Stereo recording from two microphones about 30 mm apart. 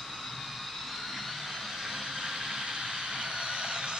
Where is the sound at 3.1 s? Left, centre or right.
Right.